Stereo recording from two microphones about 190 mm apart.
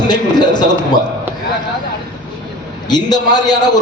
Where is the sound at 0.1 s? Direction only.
20° left (ahead or behind).